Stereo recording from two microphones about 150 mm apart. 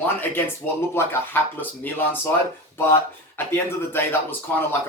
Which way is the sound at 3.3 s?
15° left (ahead or behind).